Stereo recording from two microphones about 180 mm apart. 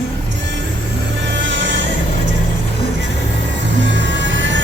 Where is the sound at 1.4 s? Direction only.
90° right.